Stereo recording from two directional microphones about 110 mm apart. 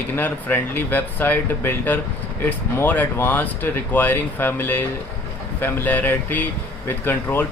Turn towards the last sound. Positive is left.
turn(degrees=20)  # may be behind; listen again after turning